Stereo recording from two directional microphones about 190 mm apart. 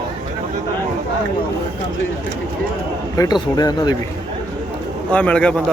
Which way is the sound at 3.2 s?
20° left (ahead or behind).